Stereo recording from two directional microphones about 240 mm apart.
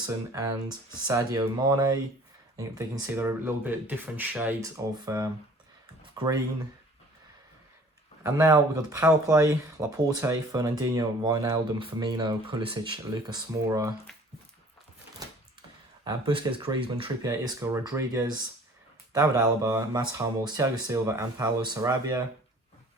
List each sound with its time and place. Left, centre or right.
0.0 s speech: centre
8.2 s speech: centre
16.0 s speech: right